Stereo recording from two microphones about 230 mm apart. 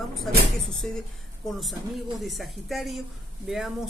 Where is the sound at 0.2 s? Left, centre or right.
Centre.